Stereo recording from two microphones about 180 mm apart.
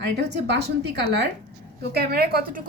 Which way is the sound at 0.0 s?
70° right (ahead or behind).